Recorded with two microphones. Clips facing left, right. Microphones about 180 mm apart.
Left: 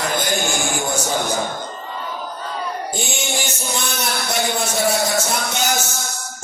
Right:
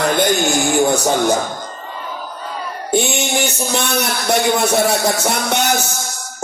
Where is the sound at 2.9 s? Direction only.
65° right (ahead or behind).